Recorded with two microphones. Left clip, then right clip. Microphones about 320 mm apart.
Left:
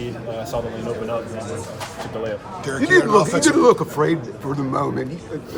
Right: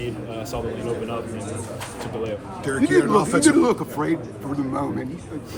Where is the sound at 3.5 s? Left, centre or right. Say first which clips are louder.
Left 5 dB; left.